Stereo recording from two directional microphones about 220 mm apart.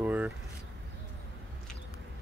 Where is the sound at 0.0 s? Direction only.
5° right (ahead or behind).